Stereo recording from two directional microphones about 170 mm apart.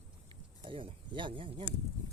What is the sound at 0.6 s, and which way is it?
Speech, 30° right (ahead or behind).